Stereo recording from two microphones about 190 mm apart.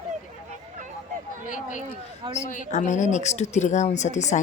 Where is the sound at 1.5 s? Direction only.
40° left (ahead or behind).